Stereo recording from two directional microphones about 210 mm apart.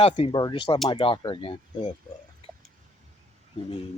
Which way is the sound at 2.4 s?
25° left (ahead or behind).